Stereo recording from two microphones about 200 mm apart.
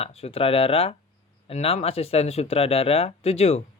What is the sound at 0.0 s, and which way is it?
Speech, 30° left (ahead or behind).